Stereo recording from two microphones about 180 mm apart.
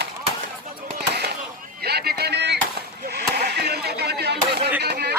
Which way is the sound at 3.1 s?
65° right (ahead or behind).